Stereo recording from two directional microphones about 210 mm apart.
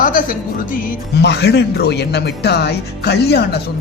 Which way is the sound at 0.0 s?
40° left (ahead or behind).